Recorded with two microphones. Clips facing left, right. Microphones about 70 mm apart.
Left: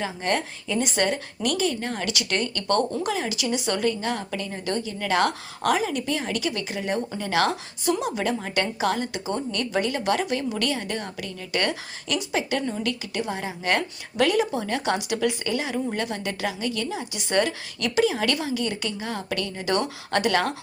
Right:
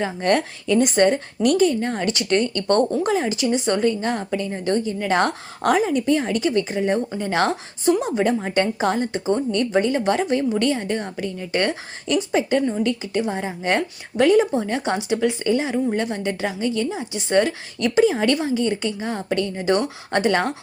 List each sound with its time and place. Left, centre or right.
0.0 s a woman's voice: right
12.5 s a woman's voice: right
17.8 s a woman's voice: right